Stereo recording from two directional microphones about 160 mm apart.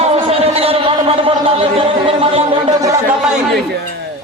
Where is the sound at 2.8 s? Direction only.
20° right (ahead or behind).